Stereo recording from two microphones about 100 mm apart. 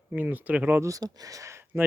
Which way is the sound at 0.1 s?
15° right (ahead or behind).